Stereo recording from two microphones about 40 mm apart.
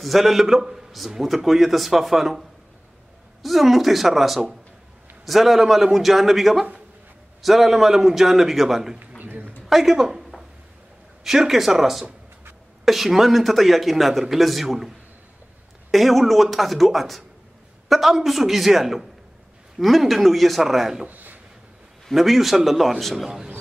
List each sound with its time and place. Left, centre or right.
0.0 s speech: centre
3.4 s speech: centre
9.2 s a sound: right
9.7 s a woman's voice: centre
11.2 s speech: centre
21.1 s a sound: right
22.1 s speech: centre
23.2 s speech: centre